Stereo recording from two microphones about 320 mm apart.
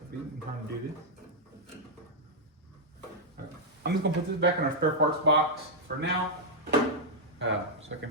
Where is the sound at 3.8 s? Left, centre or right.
Right.